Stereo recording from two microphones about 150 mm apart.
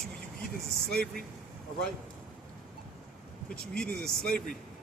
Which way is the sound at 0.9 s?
90° right.